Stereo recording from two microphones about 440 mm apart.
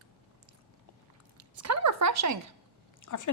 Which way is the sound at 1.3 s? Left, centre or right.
Right.